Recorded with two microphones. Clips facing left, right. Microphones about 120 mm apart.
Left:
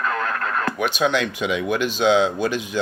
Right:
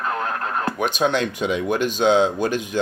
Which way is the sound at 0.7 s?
40° right (ahead or behind).